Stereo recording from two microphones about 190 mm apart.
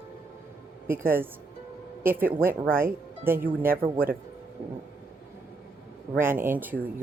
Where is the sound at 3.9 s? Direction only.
50° right (ahead or behind).